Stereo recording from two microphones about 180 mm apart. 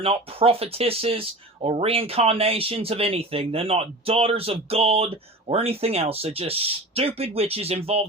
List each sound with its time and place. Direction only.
0.0 s speech: 30° right (ahead or behind)